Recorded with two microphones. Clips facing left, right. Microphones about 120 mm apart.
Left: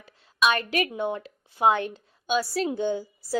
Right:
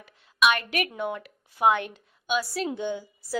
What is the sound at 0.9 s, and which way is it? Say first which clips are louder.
A woman's voice: left 2 dB; 30° left (ahead or behind).